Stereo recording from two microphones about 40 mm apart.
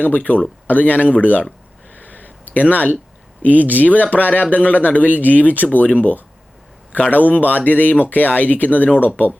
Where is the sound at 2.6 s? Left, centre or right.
Left.